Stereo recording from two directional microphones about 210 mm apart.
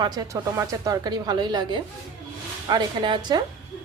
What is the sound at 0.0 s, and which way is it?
A woman's voice, 20° right (ahead or behind).